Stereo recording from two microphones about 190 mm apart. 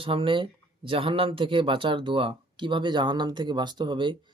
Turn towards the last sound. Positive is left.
turn(degrees=-25)  # may be behind; listen again after turning